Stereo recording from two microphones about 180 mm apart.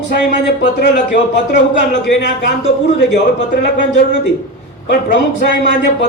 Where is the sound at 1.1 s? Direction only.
80° left.